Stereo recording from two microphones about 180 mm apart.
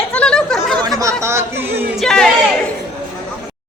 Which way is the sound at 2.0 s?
5° left (ahead or behind).